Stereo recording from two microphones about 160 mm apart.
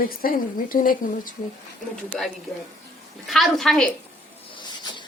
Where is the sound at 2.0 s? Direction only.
Centre (ahead or behind).